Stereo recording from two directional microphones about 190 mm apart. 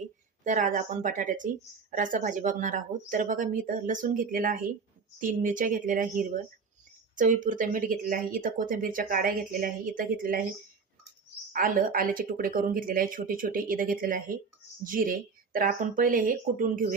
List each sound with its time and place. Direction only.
0.4 s speech: 40° right (ahead or behind)
11.5 s speech: 50° right (ahead or behind)